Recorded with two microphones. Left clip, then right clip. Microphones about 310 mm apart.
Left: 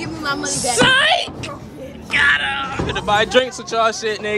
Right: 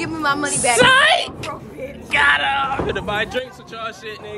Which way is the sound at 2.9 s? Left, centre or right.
Centre.